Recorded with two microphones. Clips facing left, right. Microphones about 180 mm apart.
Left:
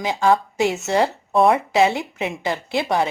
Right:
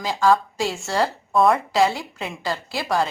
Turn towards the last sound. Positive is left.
turn(degrees=20)  # may be behind; listen again after turning